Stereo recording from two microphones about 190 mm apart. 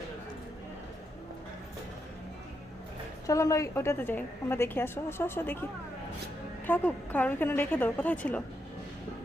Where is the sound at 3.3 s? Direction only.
15° left (ahead or behind).